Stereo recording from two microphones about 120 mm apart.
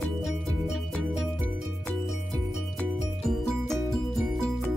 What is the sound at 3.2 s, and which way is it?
Music, centre (ahead or behind).